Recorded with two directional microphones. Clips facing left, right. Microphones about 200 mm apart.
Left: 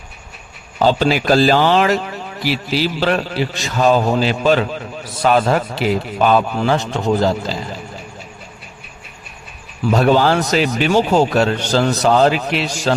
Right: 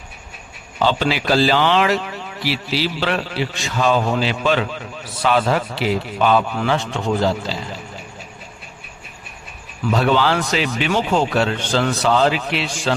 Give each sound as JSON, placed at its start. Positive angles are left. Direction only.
{"t": 0.8, "sound": "a man's voice", "side_deg": 40}
{"t": 9.9, "sound": "speech", "side_deg": 45}